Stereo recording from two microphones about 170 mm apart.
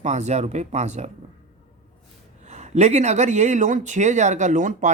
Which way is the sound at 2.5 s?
40° right (ahead or behind).